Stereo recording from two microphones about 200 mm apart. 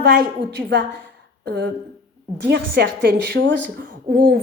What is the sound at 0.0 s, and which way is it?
Speech, 55° right (ahead or behind).